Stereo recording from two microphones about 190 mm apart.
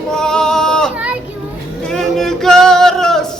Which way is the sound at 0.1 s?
5° left (ahead or behind).